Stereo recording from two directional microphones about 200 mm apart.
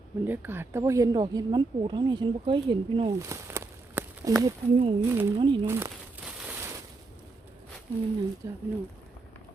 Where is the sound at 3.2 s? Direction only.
15° right (ahead or behind).